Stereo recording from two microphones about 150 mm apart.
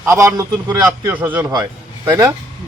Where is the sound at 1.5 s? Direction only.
25° right (ahead or behind).